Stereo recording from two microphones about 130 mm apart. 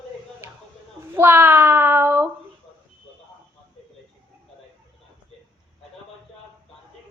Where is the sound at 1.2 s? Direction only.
15° right (ahead or behind).